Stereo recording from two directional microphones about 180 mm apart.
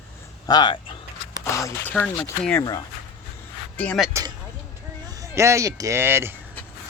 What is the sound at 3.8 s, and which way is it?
Speech, 5° left (ahead or behind).